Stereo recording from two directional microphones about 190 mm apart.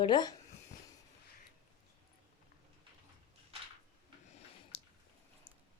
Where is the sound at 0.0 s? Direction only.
20° left (ahead or behind).